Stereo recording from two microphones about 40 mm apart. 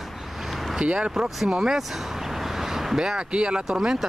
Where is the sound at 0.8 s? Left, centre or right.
Right.